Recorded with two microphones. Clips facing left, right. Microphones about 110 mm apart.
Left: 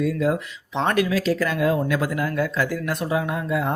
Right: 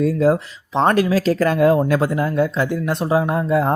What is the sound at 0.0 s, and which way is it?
Speech, 35° right (ahead or behind).